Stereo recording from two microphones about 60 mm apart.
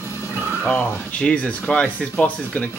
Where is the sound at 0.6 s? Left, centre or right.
Left.